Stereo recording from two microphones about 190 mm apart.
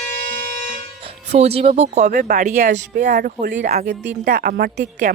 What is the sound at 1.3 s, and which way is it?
A woman's voice, 35° right (ahead or behind).